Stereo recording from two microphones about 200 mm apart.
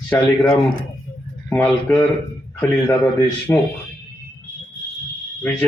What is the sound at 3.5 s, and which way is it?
Speech, 5° left (ahead or behind).